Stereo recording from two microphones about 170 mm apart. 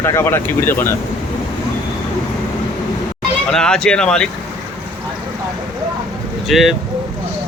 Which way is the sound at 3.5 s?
5° left (ahead or behind).